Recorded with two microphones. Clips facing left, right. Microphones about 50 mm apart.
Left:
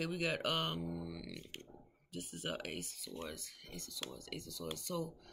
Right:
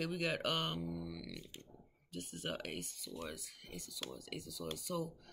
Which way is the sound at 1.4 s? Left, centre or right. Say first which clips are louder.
Left 3 dB; left.